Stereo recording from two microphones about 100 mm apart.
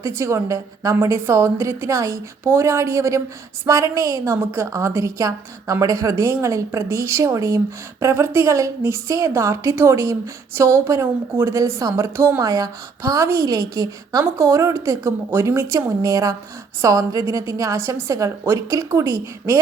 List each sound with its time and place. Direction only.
0.0 s a woman's voice: 30° right (ahead or behind)
12.4 s a woman's voice: 35° right (ahead or behind)